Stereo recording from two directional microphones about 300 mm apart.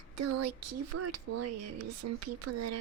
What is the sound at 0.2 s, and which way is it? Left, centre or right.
Speech, right.